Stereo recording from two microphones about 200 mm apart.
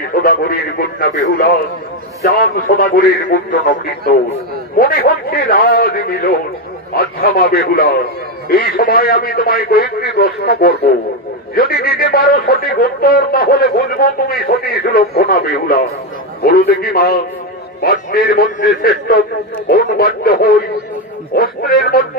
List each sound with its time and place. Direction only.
0.1 s a man's voice: 50° left (ahead or behind)